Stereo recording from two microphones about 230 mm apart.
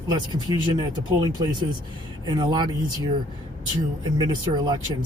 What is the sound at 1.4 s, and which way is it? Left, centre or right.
Speech, centre.